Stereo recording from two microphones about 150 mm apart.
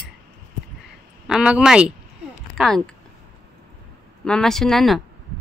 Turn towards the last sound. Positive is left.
turn(degrees=0)  # may be behind; listen again after turning